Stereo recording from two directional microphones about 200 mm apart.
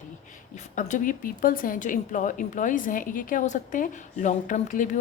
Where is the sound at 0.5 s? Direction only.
35° left (ahead or behind).